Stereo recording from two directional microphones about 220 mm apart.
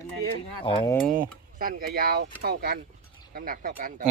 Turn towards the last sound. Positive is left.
turn(degrees=-40)  # may be behind; listen again after turning